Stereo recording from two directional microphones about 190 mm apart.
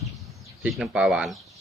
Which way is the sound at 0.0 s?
Centre (ahead or behind).